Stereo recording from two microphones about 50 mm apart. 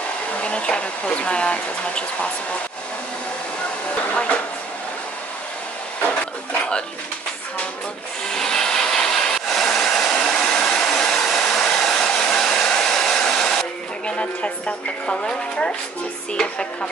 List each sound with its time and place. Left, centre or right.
0.4 s speech: left
8.3 s a sound: centre
12.6 s hair dryer: centre
15.0 s speech: centre
16.3 s music: centre